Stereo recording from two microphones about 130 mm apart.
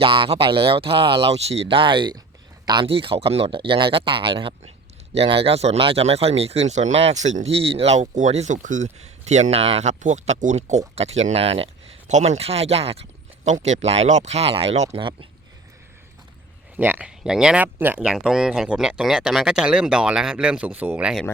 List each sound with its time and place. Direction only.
0.0 s speech: 40° right (ahead or behind); by 7.5 s 65° right (ahead or behind)
7.5 s speech: 45° right (ahead or behind)
16.7 s speech: 15° right (ahead or behind)